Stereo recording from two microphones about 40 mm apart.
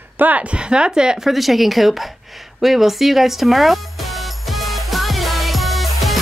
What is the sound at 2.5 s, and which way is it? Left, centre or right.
Music, centre.